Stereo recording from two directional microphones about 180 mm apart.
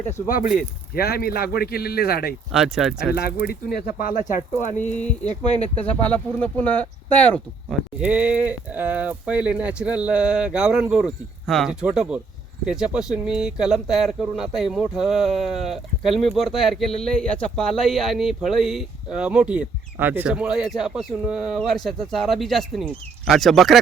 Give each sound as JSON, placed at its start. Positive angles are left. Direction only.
{"t": 0.9, "sound": "speech", "side_deg": 60}
{"t": 2.5, "sound": "speech", "side_deg": 0}
{"t": 3.2, "sound": "speech", "side_deg": 60}
{"t": 4.9, "sound": "speech", "side_deg": 5}
{"t": 8.0, "sound": "speech", "side_deg": -5}